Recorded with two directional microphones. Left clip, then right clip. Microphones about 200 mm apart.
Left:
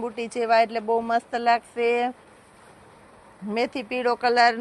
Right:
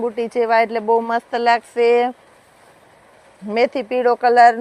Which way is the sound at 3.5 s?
55° right (ahead or behind).